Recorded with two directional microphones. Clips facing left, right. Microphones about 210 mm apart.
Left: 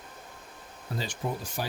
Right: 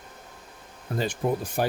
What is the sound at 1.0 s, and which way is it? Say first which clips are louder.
Speech: right 8 dB; 55° right (ahead or behind).